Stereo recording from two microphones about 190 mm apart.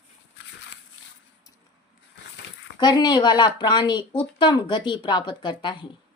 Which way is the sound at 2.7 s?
20° left (ahead or behind).